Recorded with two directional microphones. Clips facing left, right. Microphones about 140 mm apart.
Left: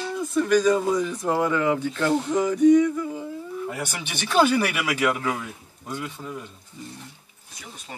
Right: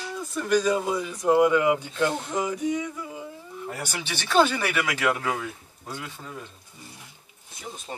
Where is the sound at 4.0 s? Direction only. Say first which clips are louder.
Left 1 dB; 15° left (ahead or behind).